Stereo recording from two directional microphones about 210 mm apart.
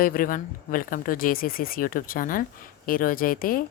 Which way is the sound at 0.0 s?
40° left (ahead or behind).